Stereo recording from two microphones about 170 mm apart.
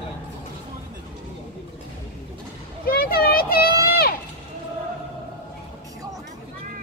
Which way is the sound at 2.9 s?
65° left (ahead or behind).